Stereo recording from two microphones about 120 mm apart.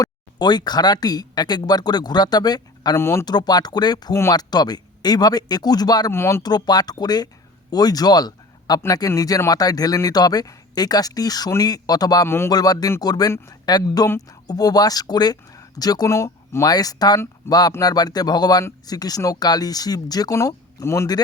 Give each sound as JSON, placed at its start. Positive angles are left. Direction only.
{"t": 0.0, "sound": "speech", "side_deg": 35}
{"t": 3.0, "sound": "speech", "side_deg": 20}
{"t": 3.2, "sound": "speech", "side_deg": 35}
{"t": 4.1, "sound": "speech", "side_deg": 20}
{"t": 4.4, "sound": "speech", "side_deg": 35}
{"t": 6.1, "sound": "speech", "side_deg": 20}
{"t": 6.4, "sound": "speech", "side_deg": 35}